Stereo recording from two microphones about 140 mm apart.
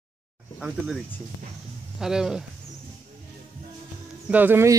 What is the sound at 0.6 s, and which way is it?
Speech, 5° right (ahead or behind).